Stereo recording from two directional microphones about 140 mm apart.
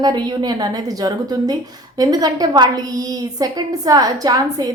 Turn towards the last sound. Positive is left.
turn(degrees=-25)  # may be behind; listen again after turning